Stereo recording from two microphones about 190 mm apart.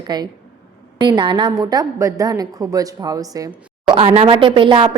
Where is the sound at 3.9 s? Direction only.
30° right (ahead or behind).